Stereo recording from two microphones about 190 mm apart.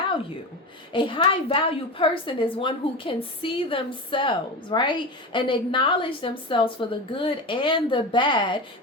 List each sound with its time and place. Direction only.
0.9 s a woman's voice: 25° left (ahead or behind)